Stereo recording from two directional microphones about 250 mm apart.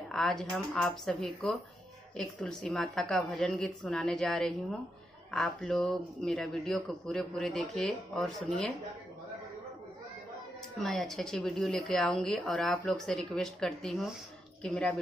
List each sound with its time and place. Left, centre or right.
0.1 s speech: centre
10.8 s speech: centre